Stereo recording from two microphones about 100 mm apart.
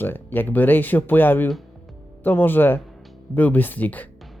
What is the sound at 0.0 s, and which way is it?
Speech, 20° left (ahead or behind).